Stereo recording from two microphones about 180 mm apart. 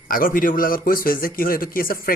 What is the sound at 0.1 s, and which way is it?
A man's voice, 50° left (ahead or behind).